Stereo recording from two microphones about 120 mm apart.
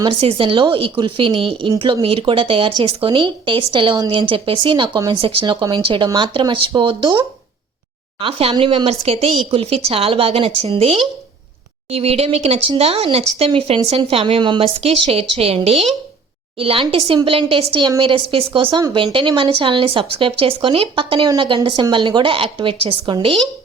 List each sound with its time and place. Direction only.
0.0 s speech: 45° right (ahead or behind)
8.2 s speech: 50° right (ahead or behind)
13.5 s speech: 45° right (ahead or behind)
14.6 s speech: 55° right (ahead or behind)
18.7 s speech: 35° right (ahead or behind)